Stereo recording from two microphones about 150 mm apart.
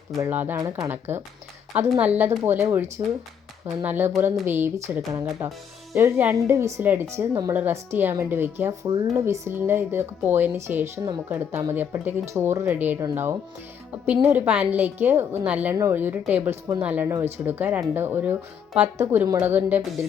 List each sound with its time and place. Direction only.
0.2 s speech: 15° right (ahead or behind)
3.8 s speech: 15° right (ahead or behind)